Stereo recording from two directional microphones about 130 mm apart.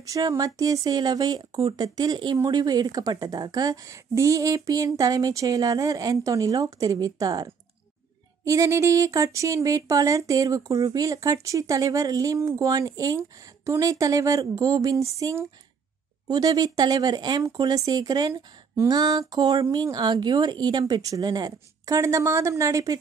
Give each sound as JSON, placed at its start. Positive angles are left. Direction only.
{"t": 0.0, "sound": "a woman's voice", "side_deg": -25}
{"t": 8.5, "sound": "a woman's voice", "side_deg": -25}